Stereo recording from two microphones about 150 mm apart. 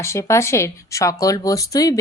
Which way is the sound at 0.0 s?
20° left (ahead or behind).